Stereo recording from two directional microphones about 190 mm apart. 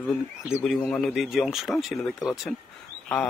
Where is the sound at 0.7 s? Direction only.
5° left (ahead or behind).